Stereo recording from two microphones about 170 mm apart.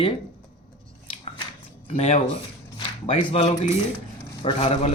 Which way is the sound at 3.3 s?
35° left (ahead or behind).